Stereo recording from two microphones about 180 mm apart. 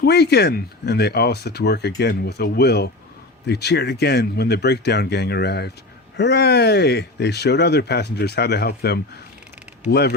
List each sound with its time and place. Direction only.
0.0 s speech: 65° left (ahead or behind)